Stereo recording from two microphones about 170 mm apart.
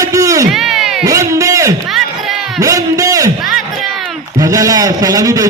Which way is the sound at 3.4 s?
Centre (ahead or behind).